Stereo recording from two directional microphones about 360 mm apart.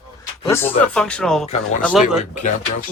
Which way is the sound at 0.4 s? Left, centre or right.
Centre.